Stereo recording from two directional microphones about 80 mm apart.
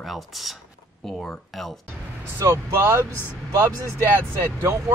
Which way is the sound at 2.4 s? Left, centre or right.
Right.